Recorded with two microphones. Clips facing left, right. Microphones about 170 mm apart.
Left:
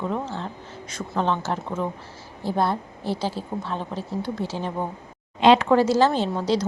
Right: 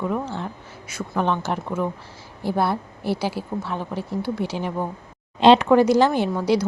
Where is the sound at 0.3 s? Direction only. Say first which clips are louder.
Right 1 dB; 10° right (ahead or behind).